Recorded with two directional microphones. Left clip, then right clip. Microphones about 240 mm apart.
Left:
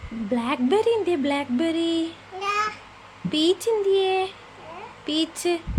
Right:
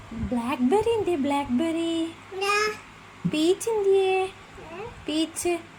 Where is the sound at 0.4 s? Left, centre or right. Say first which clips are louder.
Left 2 dB; centre.